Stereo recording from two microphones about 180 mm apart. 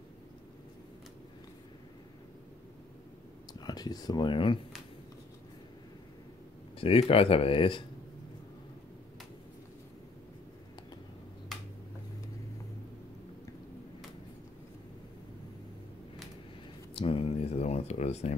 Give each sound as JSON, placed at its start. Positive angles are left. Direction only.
{"t": 3.6, "sound": "speech", "side_deg": 20}
{"t": 6.8, "sound": "speech", "side_deg": 30}
{"t": 16.9, "sound": "a sound", "side_deg": 30}